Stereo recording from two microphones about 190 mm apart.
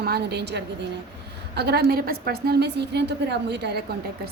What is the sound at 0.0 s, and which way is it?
A woman's voice, 60° right (ahead or behind).